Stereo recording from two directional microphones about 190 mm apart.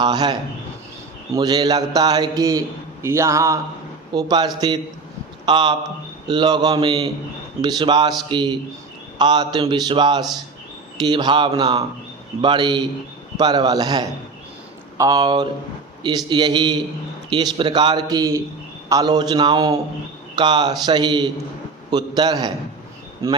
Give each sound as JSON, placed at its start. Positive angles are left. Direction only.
{"t": 0.0, "sound": "a man's voice", "side_deg": -20}